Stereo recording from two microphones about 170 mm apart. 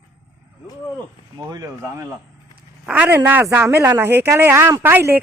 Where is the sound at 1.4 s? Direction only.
20° right (ahead or behind).